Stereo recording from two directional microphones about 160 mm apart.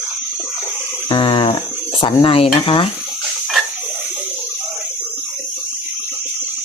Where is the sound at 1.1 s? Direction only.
30° left (ahead or behind).